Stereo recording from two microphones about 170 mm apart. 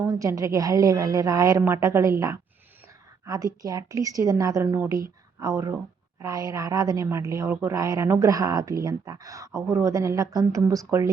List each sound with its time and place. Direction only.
0.0 s a woman's voice: 20° right (ahead or behind)